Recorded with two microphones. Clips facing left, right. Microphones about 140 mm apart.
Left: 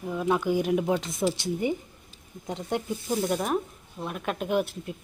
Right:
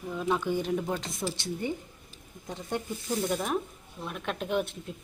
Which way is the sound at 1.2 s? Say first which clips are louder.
Left 8 dB; 25° left (ahead or behind).